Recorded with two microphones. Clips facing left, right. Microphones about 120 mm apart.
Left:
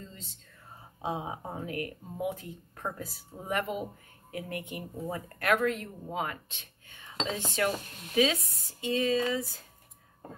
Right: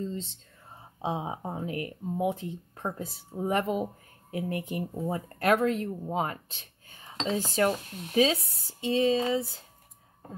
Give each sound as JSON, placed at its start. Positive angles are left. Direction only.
{"t": 0.0, "sound": "speech", "side_deg": -30}